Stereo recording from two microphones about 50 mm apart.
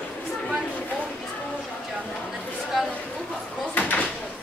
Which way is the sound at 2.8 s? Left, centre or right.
Centre.